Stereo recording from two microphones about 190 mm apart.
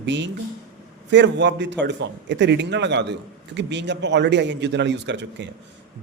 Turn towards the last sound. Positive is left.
turn(degrees=-65)  # may be behind; listen again after turning